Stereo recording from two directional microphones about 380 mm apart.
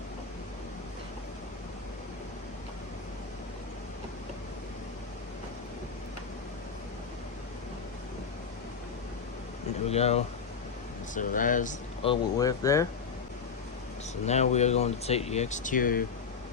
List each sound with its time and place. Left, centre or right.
9.8 s speech: centre
14.3 s speech: centre